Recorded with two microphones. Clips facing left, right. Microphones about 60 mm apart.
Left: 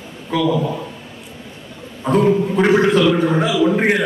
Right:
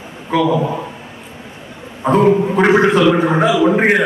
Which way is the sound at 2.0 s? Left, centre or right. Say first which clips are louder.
Right 3 dB; right.